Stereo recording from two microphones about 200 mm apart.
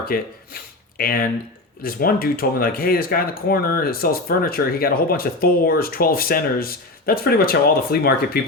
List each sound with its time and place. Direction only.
0.1 s speech: 45° left (ahead or behind)